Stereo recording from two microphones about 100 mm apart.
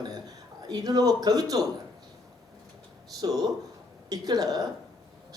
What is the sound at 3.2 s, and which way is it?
A man's voice, 40° right (ahead or behind).